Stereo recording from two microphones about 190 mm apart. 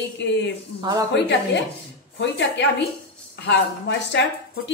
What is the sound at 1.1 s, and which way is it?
Speech, 65° left (ahead or behind).